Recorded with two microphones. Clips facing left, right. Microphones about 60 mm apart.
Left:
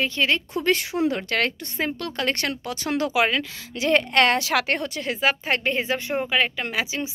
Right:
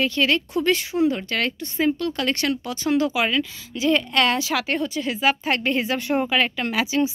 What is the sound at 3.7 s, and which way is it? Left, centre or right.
Speech, left.